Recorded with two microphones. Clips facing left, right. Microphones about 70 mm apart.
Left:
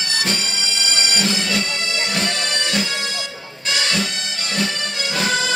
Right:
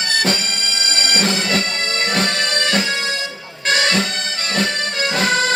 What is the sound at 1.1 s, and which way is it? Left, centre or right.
Bagpipes, right.